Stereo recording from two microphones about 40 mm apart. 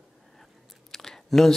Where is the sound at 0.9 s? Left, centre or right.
Centre.